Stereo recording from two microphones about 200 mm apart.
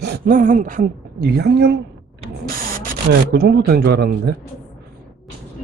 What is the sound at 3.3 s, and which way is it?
Speech, 50° right (ahead or behind).